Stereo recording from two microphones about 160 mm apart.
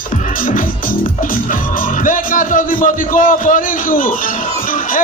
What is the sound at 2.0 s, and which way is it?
A man's voice, 55° left (ahead or behind).